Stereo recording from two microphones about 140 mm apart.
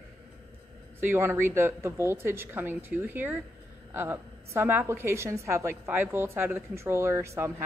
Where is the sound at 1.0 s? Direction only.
15° right (ahead or behind).